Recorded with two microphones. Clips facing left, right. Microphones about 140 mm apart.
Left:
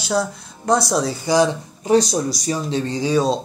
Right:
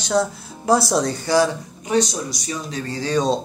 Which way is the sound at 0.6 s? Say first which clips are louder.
Even; 5° right (ahead or behind).